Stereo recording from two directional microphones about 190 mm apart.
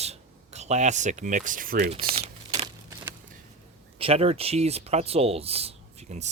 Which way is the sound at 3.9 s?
30° right (ahead or behind).